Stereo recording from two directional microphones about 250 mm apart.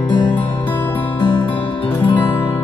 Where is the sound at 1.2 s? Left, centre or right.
Centre.